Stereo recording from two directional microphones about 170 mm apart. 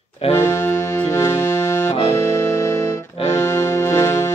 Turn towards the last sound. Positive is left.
turn(degrees=15)  # may be behind; listen again after turning